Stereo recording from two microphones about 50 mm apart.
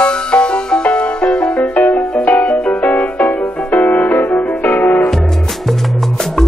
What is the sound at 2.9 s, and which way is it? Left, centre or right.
Music, left.